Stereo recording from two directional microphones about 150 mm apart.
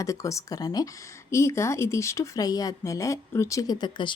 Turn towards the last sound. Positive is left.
turn(degrees=30)  # may be behind; listen again after turning